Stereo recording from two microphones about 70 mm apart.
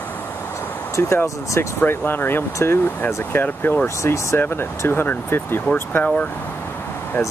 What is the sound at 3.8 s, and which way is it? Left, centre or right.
Speech, left.